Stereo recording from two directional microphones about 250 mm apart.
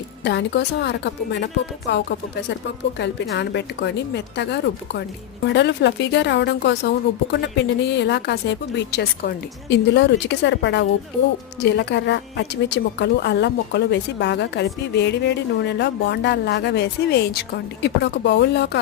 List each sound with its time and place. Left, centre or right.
0.3 s a woman's voice: left